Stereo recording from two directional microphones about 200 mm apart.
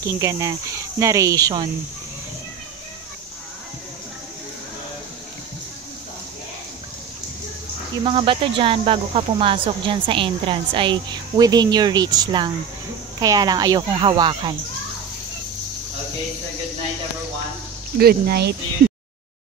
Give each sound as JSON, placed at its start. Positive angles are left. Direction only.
{"t": 0.0, "sound": "speech", "side_deg": -15}
{"t": 8.0, "sound": "speech", "side_deg": -25}
{"t": 17.9, "sound": "speech", "side_deg": -50}